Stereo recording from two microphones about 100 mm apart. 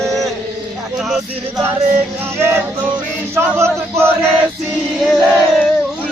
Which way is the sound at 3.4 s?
25° right (ahead or behind).